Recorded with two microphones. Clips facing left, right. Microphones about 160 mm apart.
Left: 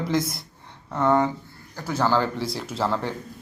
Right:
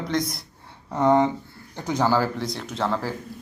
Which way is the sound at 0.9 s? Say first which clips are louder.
Right 2 dB; 15° right (ahead or behind).